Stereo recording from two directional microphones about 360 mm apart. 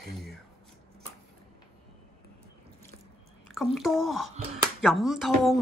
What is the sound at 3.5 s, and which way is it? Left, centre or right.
Speech, centre.